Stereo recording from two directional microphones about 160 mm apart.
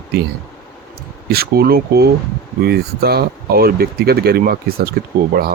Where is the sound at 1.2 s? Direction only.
75° right (ahead or behind).